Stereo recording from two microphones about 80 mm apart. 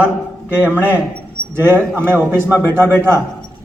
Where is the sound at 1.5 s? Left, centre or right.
Right.